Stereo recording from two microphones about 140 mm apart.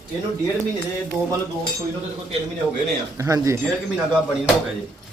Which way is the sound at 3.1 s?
20° right (ahead or behind).